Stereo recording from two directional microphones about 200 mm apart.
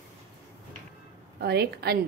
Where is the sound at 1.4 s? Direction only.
55° right (ahead or behind).